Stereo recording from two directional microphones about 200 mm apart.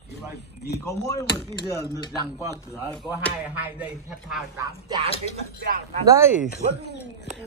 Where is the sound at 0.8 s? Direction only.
15° left (ahead or behind).